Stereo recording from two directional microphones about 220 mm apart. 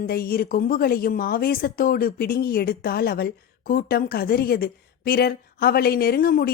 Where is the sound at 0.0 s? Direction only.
45° left (ahead or behind).